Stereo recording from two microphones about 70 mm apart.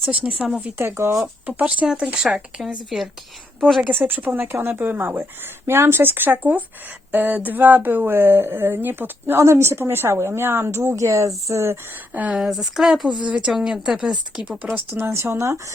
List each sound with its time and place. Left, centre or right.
0.0 s speech: right
0.8 s speech: right
1.5 s speech: centre
2.2 s speech: centre
3.8 s speech: right
12.3 s speech: centre
14.9 s speech: right